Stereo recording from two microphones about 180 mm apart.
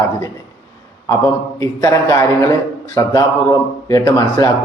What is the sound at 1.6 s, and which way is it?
A man's voice, 15° left (ahead or behind).